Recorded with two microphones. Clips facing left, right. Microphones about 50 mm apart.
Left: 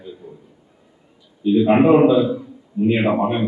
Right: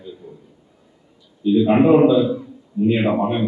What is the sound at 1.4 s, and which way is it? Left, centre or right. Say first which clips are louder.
A man's voice: even; left.